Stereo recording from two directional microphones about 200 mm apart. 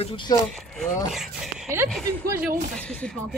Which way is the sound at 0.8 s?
Centre (ahead or behind).